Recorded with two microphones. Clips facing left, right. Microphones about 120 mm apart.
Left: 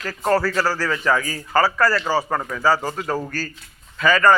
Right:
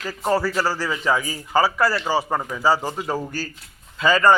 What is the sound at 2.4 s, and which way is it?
Speech, 10° right (ahead or behind).